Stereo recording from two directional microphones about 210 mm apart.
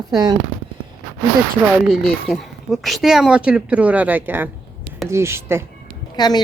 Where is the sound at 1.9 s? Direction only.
Centre (ahead or behind).